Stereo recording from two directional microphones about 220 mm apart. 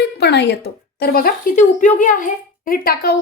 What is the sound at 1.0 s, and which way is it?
A woman's voice, 45° left (ahead or behind).